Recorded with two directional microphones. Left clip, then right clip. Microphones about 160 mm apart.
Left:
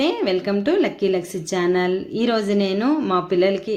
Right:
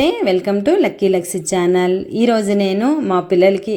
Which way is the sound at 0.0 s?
30° right (ahead or behind).